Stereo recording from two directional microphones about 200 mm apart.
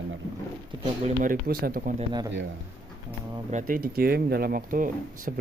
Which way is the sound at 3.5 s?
40° right (ahead or behind).